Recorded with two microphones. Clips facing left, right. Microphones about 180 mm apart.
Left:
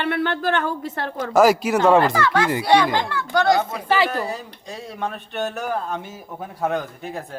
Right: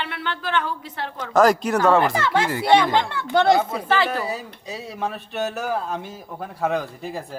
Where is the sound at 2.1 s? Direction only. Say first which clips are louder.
Left 2 dB; 20° right (ahead or behind).